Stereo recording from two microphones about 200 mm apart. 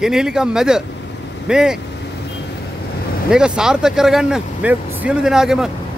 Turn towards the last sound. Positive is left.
turn(degrees=-5)  # may be behind; listen again after turning